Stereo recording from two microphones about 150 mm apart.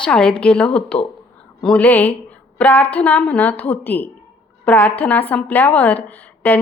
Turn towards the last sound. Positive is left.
turn(degrees=10)  # may be behind; listen again after turning